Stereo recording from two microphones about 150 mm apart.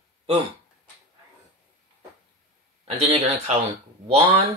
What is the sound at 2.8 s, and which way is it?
A man's voice, 40° right (ahead or behind).